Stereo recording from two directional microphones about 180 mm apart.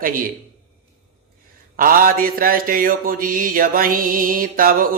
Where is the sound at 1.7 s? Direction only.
50° right (ahead or behind).